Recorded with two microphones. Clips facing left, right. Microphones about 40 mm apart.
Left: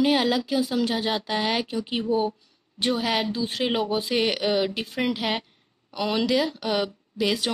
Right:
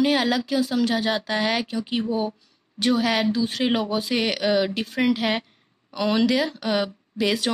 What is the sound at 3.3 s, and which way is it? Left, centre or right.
Speech, centre.